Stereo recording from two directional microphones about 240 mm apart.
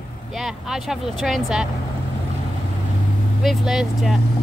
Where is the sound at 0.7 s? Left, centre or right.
Centre.